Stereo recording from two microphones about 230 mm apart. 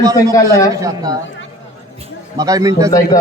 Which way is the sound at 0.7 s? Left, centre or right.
Centre.